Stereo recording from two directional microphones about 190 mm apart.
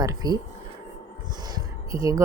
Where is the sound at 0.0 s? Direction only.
20° right (ahead or behind).